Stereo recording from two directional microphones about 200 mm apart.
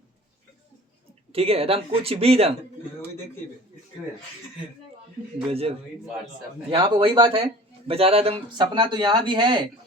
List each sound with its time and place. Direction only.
1.3 s speech: 30° right (ahead or behind)
5.5 s speech: 30° right (ahead or behind)